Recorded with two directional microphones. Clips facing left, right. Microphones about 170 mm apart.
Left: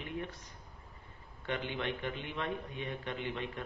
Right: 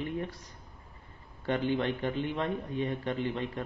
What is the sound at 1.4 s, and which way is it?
A man's voice, 35° right (ahead or behind).